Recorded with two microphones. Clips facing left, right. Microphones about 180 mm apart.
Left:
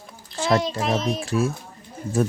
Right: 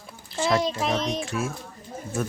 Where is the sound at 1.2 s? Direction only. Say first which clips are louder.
Left 6 dB; 35° left (ahead or behind).